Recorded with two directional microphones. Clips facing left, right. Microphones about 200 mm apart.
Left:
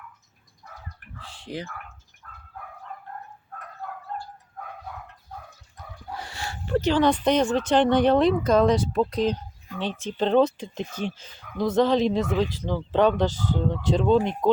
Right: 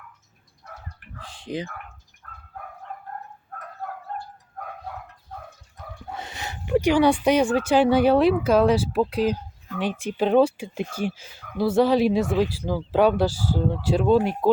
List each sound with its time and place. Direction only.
1.2 s speech: 15° right (ahead or behind)
6.1 s speech: 20° right (ahead or behind)